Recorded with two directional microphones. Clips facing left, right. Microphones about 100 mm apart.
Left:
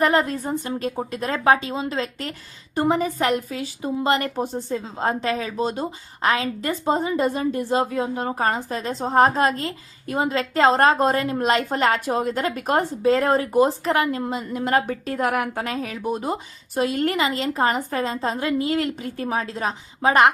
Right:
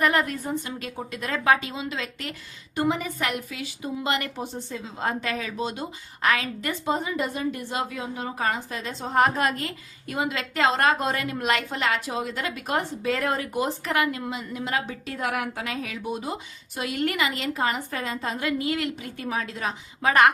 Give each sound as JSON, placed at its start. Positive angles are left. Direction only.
{"t": 0.0, "sound": "a woman's voice", "side_deg": 30}